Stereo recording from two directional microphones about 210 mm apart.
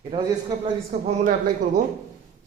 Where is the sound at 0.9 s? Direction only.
35° right (ahead or behind).